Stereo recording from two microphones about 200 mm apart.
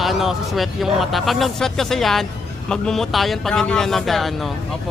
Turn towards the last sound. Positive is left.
turn(degrees=0)  # may be behind; listen again after turning